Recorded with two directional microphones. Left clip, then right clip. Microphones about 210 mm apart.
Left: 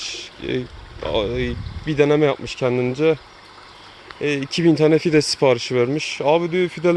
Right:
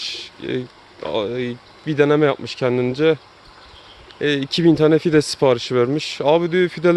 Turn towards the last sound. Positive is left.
turn(degrees=-25)  # may be behind; listen again after turning